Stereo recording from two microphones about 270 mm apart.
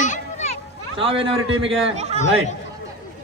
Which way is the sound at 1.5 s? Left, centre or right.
Right.